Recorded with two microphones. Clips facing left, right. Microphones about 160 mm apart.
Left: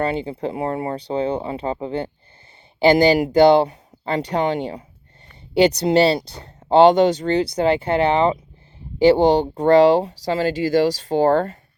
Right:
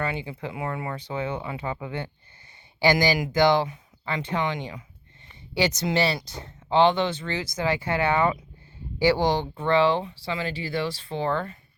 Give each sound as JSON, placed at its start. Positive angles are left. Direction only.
{"t": 0.0, "sound": "speech", "side_deg": 30}